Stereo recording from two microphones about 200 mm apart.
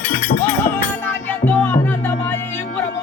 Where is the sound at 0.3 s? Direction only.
55° left (ahead or behind).